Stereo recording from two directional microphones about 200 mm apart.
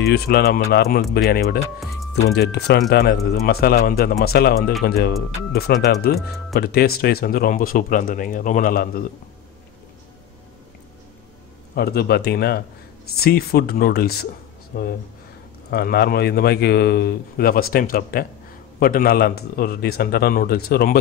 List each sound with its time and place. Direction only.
0.0 s speech: 50° left (ahead or behind)
11.7 s speech: 50° left (ahead or behind)